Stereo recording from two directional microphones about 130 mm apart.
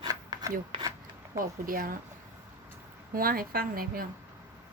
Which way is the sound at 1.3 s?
90° right.